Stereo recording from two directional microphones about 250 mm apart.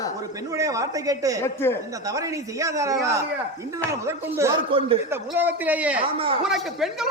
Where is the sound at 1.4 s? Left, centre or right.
Centre.